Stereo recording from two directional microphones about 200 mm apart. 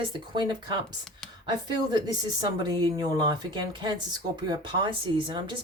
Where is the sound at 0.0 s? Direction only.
25° right (ahead or behind).